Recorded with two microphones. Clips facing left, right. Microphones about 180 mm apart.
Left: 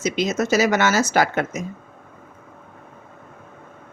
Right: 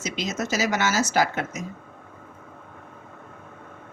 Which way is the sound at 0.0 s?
55° left (ahead or behind).